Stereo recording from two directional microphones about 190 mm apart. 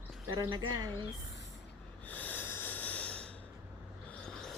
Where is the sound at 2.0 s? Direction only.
10° left (ahead or behind).